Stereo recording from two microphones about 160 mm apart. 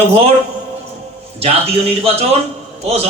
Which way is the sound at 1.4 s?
40° right (ahead or behind).